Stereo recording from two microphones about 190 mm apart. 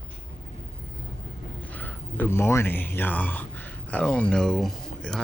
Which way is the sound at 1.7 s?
10° left (ahead or behind).